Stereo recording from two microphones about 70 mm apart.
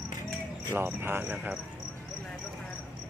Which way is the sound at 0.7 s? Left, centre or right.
Right.